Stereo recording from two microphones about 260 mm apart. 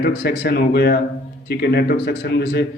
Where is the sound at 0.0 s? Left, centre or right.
Left.